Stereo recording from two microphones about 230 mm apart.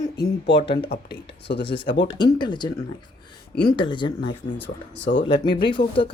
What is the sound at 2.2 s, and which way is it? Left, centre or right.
Speech, centre.